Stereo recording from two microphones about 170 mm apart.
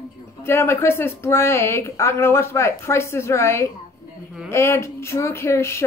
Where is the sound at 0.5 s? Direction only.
15° left (ahead or behind).